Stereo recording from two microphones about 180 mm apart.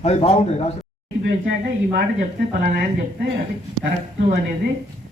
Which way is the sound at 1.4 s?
55° right (ahead or behind).